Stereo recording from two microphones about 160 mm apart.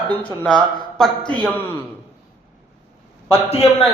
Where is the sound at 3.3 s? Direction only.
40° left (ahead or behind).